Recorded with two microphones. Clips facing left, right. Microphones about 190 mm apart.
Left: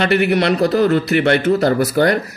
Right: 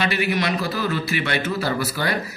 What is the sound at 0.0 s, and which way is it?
A man's voice, 60° left (ahead or behind).